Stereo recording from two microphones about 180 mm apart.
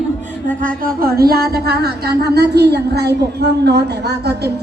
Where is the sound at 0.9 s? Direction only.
55° right (ahead or behind).